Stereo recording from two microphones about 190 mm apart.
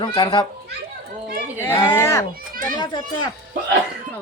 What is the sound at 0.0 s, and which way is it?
Speech, 25° left (ahead or behind).